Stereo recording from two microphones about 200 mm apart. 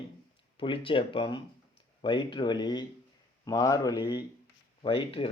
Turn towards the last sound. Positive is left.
turn(degrees=25)  # may be behind; listen again after turning